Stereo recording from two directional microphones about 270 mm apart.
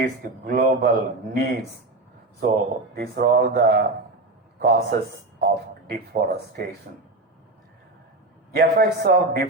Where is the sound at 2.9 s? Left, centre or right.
Right.